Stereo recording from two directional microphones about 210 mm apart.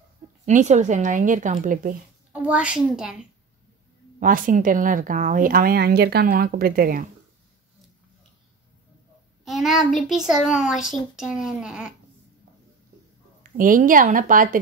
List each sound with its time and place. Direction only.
0.5 s a woman's voice: 35° right (ahead or behind)
2.3 s a child's voice: 5° right (ahead or behind)
4.2 s speech: 40° right (ahead or behind)
9.4 s a child's voice: centre (ahead or behind)
13.4 s a woman's voice: 40° right (ahead or behind)